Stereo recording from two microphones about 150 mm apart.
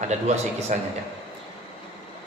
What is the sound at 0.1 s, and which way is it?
Speech, 50° right (ahead or behind).